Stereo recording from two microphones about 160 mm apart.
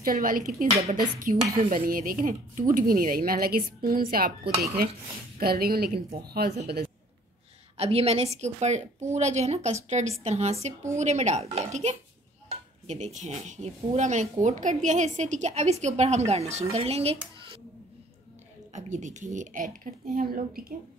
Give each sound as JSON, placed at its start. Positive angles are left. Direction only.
{"t": 0.0, "sound": "speech", "side_deg": -60}
{"t": 1.3, "sound": "speech", "side_deg": -45}
{"t": 1.7, "sound": "speech", "side_deg": -60}
{"t": 7.7, "sound": "a woman's voice", "side_deg": -40}
{"t": 18.7, "sound": "speech", "side_deg": -50}